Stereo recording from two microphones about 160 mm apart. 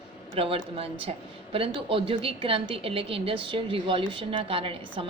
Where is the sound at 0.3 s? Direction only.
35° right (ahead or behind).